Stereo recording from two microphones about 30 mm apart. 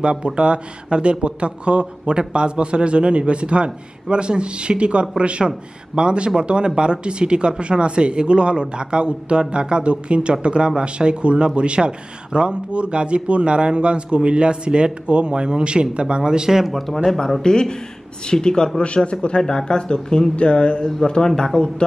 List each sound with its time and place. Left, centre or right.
0.0 s a man's voice: right
16.7 s speech: centre
17.4 s speech: left
19.0 s a man's voice: left